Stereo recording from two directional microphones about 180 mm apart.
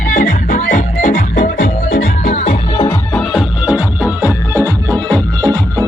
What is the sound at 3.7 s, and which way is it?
Music, 15° left (ahead or behind).